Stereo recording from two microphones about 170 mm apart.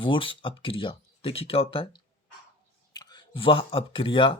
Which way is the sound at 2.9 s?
25° left (ahead or behind).